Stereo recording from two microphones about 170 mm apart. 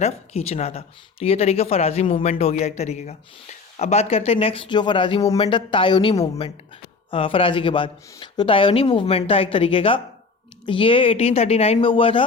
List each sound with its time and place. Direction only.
0.0 s speech: 40° left (ahead or behind)